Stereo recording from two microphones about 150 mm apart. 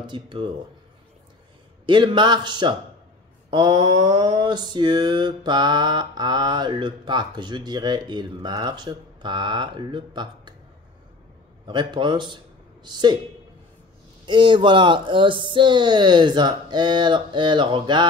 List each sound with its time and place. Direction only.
0.0 s speech: 35° right (ahead or behind)
1.9 s speech: 30° right (ahead or behind)
3.4 s mantra: 30° right (ahead or behind)
11.6 s speech: 30° right (ahead or behind)
12.8 s mantra: 30° right (ahead or behind)
14.2 s speech: 30° right (ahead or behind)